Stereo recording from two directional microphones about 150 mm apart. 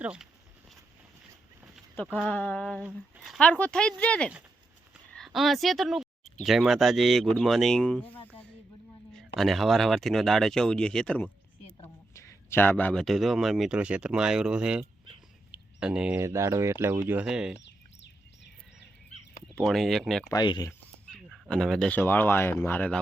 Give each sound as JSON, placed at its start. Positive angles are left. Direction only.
{"t": 0.0, "sound": "speech", "side_deg": -5}
{"t": 2.1, "sound": "speech", "side_deg": 10}
{"t": 5.1, "sound": "a sound", "side_deg": 0}
{"t": 6.4, "sound": "a man's voice", "side_deg": 0}
{"t": 15.5, "sound": "a sound", "side_deg": -5}
{"t": 16.2, "sound": "speech", "side_deg": -20}
{"t": 17.1, "sound": "speech", "side_deg": -5}
{"t": 19.5, "sound": "speech", "side_deg": 0}
{"t": 20.3, "sound": "speech", "side_deg": 25}
{"t": 21.1, "sound": "speech", "side_deg": 0}